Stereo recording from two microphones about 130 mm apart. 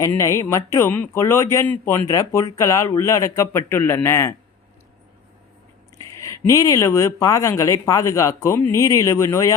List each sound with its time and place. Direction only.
0.1 s speech: 20° left (ahead or behind)
6.1 s speech: 25° left (ahead or behind)